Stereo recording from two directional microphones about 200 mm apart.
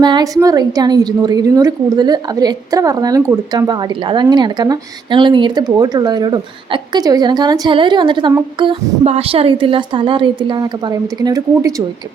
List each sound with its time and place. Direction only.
0.0 s a woman's voice: 20° right (ahead or behind)